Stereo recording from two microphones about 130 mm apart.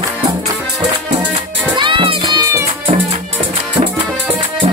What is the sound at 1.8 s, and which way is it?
Music, 40° right (ahead or behind).